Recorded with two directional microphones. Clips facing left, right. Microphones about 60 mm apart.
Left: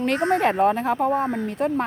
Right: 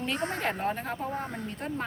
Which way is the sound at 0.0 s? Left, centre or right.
Left.